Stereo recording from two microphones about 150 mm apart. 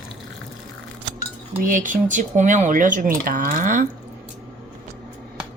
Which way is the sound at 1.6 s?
60° right (ahead or behind).